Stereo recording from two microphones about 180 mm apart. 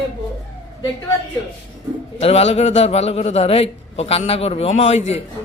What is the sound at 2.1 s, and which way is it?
A man's voice, 35° left (ahead or behind).